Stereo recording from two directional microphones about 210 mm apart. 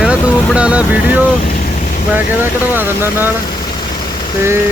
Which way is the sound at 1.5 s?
35° left (ahead or behind).